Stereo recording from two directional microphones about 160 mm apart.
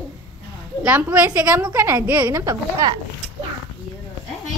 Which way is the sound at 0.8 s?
10° right (ahead or behind).